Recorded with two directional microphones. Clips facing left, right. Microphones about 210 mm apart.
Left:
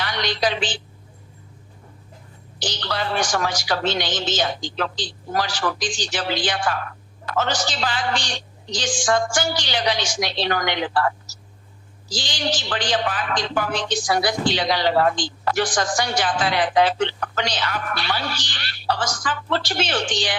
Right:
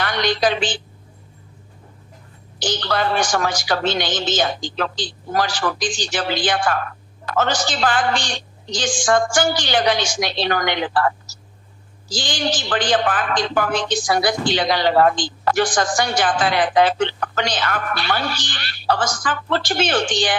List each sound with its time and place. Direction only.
0.0 s a woman's voice: 50° right (ahead or behind)
2.6 s a man's voice: 50° right (ahead or behind)